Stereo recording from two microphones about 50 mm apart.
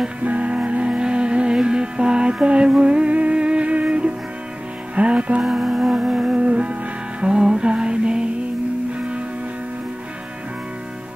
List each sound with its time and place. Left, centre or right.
0.2 s music: right
5.4 s music: centre